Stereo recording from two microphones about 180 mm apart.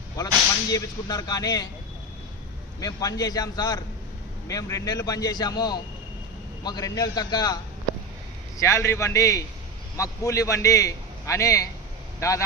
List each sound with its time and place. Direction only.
0.7 s a man's voice: 20° left (ahead or behind)
2.8 s a man's voice: 20° left (ahead or behind)